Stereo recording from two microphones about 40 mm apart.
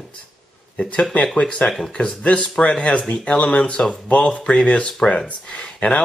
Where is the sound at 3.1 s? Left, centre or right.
Left.